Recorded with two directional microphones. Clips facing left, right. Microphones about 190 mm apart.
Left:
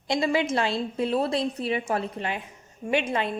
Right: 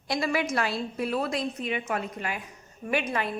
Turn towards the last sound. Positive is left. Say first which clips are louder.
# left 3 dB
turn(degrees=25)  # may be behind; listen again after turning